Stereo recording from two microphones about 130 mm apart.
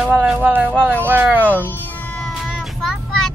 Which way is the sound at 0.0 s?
10° right (ahead or behind).